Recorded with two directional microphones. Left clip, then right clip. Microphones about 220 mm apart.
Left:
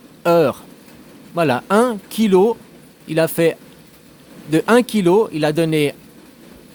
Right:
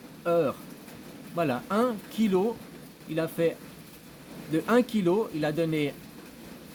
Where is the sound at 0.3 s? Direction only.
45° left (ahead or behind).